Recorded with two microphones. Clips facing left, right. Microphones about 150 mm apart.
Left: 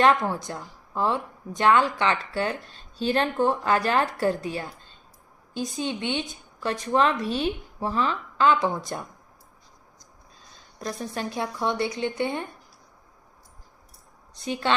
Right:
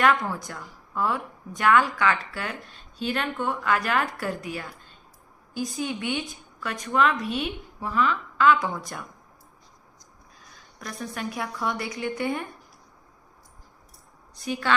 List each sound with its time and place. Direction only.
0.0 s a woman's voice: 30° left (ahead or behind)
10.5 s a woman's voice: 30° left (ahead or behind)
14.3 s a woman's voice: 25° left (ahead or behind)